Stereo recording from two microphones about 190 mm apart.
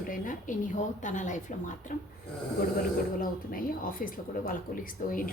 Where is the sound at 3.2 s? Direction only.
50° left (ahead or behind).